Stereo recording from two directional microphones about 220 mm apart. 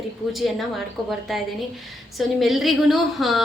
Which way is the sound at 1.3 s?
Centre (ahead or behind).